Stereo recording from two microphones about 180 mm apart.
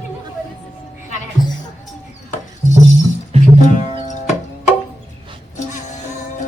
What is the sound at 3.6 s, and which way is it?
Music, 45° left (ahead or behind).